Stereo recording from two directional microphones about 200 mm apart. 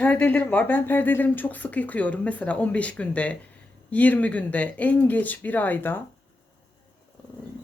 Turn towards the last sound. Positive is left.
turn(degrees=10)  # may be behind; listen again after turning